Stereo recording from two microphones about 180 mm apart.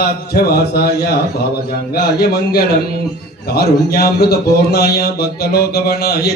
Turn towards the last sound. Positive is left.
turn(degrees=60)  # may be behind; listen again after turning